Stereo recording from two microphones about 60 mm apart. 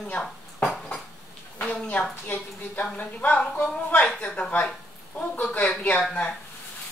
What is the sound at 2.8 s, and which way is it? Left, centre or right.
A woman's voice, left.